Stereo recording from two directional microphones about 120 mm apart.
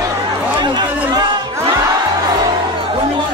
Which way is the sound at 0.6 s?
35° right (ahead or behind).